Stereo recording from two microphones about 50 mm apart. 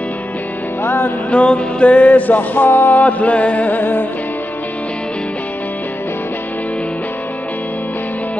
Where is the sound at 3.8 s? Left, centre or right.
Left.